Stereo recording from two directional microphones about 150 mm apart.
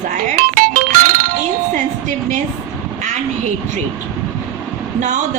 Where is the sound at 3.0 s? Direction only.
50° right (ahead or behind).